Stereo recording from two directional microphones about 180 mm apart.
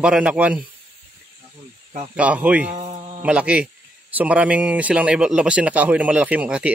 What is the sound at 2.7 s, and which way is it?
Speech, 30° right (ahead or behind).